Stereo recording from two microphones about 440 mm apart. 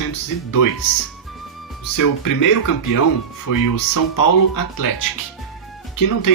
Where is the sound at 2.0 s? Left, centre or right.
Left.